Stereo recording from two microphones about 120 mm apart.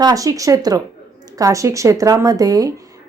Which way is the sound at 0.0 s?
30° right (ahead or behind).